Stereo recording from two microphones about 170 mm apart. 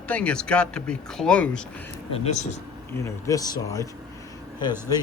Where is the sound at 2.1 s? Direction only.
40° left (ahead or behind).